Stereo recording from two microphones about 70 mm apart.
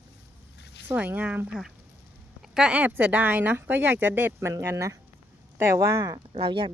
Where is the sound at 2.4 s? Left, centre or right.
Centre.